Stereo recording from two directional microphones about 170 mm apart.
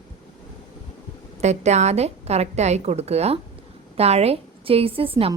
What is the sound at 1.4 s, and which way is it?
A woman's voice, 40° right (ahead or behind).